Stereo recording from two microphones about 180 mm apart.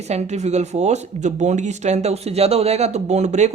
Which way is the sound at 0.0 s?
35° right (ahead or behind).